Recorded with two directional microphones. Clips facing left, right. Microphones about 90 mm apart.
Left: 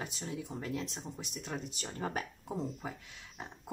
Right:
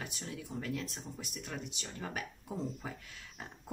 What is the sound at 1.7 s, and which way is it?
Speech, 40° left (ahead or behind).